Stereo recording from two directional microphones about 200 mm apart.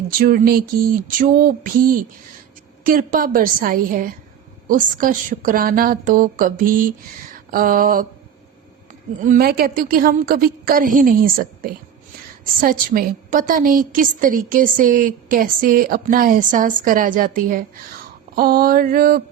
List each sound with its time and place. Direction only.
0.1 s a woman's voice: 45° right (ahead or behind)